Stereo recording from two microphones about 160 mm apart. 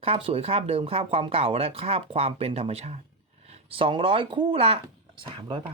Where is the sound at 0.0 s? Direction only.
35° right (ahead or behind).